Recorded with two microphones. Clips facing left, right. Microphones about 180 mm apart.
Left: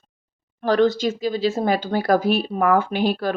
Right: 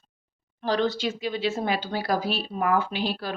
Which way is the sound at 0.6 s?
50° left (ahead or behind).